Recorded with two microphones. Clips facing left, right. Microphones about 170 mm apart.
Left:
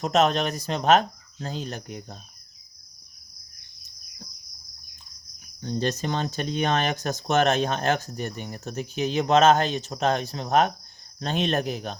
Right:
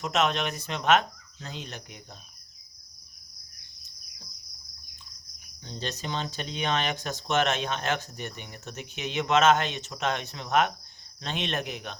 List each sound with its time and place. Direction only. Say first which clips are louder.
0.0 s speech: left 5 dB; 40° left (ahead or behind)
5.5 s speech: left 9 dB; 50° left (ahead or behind)